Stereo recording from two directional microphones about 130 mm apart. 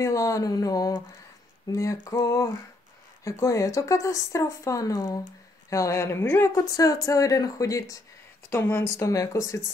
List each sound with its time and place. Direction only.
0.0 s speech: 25° left (ahead or behind)